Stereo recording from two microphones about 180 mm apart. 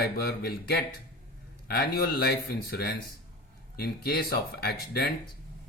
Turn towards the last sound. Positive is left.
turn(degrees=60)  # may be behind; listen again after turning